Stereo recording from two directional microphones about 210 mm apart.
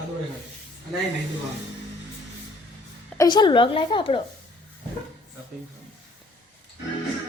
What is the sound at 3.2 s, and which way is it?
A woman's voice, 20° left (ahead or behind).